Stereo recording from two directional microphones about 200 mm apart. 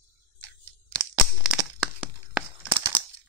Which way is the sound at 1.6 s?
10° right (ahead or behind).